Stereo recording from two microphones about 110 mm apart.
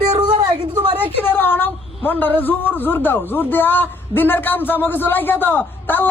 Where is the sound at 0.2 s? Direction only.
40° right (ahead or behind).